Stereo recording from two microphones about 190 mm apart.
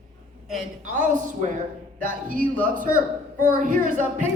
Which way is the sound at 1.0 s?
40° right (ahead or behind).